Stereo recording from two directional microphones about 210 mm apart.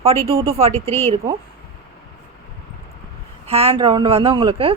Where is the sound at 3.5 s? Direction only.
30° right (ahead or behind).